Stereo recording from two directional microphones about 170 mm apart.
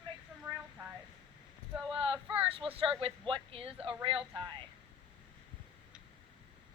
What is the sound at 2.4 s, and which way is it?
Speech, 35° right (ahead or behind).